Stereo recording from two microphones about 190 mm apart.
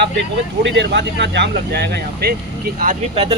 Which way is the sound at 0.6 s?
70° right (ahead or behind).